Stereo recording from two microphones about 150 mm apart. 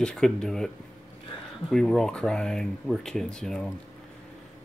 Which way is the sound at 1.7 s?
5° left (ahead or behind).